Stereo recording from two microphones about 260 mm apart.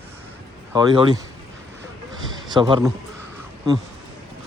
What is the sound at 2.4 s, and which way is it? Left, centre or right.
Speech, centre.